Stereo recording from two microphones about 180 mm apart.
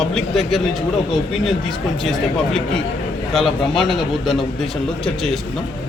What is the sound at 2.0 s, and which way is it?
Speech, centre (ahead or behind).